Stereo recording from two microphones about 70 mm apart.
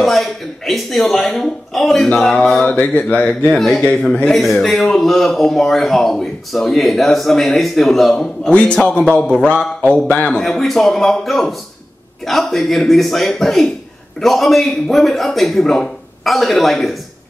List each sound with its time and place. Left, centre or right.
0.0 s speech: centre
2.6 s speech: centre
3.5 s speech: centre
10.2 s speech: centre